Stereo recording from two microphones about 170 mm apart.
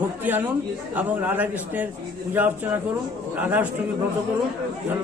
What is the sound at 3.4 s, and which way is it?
Speech, 10° right (ahead or behind).